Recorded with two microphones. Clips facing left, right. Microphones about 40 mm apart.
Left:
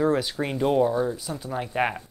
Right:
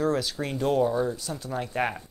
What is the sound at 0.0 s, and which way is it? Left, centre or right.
Speech, centre.